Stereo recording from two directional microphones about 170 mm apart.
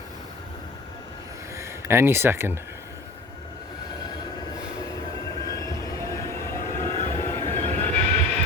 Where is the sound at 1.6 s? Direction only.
15° right (ahead or behind).